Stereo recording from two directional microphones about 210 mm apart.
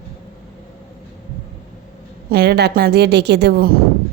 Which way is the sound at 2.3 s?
50° right (ahead or behind).